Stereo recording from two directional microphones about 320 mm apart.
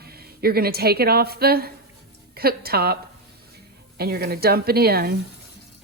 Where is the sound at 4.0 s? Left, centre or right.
Right.